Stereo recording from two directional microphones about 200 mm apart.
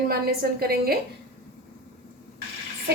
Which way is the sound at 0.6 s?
50° right (ahead or behind).